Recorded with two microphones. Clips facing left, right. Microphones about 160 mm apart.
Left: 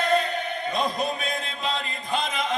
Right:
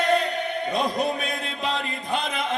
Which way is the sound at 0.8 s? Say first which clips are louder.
Right 2 dB; 70° right (ahead or behind).